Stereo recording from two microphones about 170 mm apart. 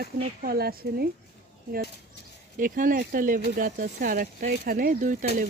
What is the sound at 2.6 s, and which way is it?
Speech, 55° right (ahead or behind).